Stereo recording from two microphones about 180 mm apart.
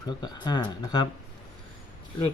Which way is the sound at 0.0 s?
25° left (ahead or behind).